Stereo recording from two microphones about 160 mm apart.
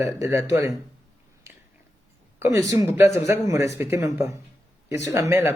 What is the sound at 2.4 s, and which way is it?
A man's voice, 20° right (ahead or behind).